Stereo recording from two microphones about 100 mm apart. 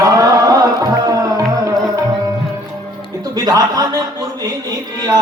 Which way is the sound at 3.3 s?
40° right (ahead or behind).